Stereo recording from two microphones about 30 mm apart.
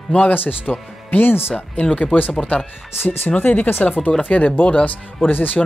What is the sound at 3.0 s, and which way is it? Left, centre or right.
Speech, left.